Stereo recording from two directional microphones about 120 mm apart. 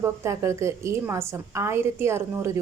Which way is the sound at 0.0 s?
25° right (ahead or behind).